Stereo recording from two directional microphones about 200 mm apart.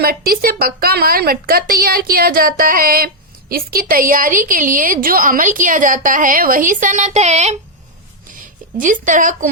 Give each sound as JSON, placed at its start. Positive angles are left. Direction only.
{"t": 0.0, "sound": "a woman's voice", "side_deg": -50}